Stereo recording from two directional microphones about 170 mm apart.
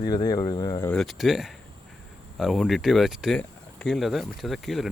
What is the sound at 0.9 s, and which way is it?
Speech, centre (ahead or behind).